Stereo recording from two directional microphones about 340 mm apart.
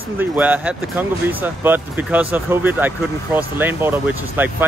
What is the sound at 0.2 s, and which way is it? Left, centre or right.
Speech, centre.